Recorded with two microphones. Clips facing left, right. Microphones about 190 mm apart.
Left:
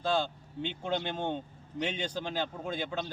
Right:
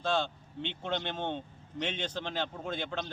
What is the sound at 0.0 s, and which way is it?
A man's voice, 5° left (ahead or behind).